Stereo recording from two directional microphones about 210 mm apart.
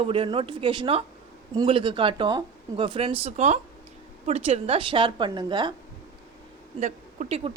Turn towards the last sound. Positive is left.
turn(degrees=-30)  # may be behind; listen again after turning